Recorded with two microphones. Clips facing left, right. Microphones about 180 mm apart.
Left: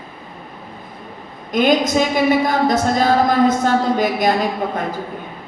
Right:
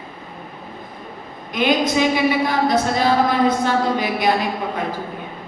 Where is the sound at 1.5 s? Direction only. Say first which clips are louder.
Left 3 dB; 45° left (ahead or behind).